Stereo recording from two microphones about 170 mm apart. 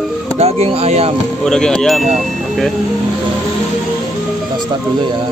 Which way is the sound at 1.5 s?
5° left (ahead or behind).